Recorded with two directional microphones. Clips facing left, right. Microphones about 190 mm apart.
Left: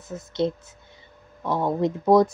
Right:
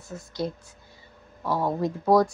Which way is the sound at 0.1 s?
25° left (ahead or behind).